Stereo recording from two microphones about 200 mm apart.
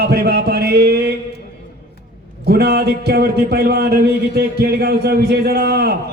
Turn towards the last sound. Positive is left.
turn(degrees=-55)  # may be behind; listen again after turning